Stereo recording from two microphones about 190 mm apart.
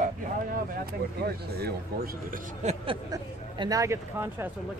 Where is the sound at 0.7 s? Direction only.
55° right (ahead or behind); by 3.0 s 35° right (ahead or behind).